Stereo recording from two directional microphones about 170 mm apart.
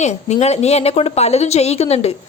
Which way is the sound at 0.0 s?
40° left (ahead or behind).